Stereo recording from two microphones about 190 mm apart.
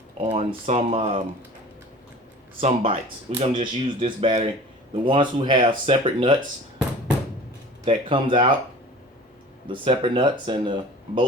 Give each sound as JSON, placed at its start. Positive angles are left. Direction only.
{"t": 0.2, "sound": "speech", "side_deg": -35}
{"t": 2.6, "sound": "speech", "side_deg": -35}
{"t": 7.9, "sound": "speech", "side_deg": -25}
{"t": 9.6, "sound": "speech", "side_deg": -25}